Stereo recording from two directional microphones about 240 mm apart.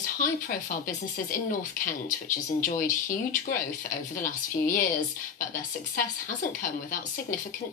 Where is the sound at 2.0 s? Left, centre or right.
Left.